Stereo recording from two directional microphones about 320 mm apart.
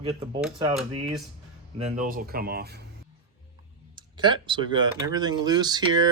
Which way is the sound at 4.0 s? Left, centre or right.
Centre.